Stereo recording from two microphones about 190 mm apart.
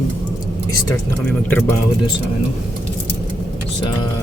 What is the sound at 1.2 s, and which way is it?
Speech, 10° left (ahead or behind).